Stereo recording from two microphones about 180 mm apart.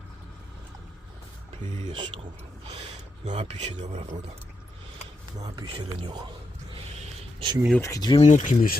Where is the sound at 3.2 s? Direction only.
40° right (ahead or behind).